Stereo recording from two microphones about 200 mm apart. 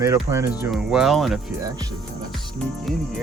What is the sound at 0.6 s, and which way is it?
Speech, centre (ahead or behind).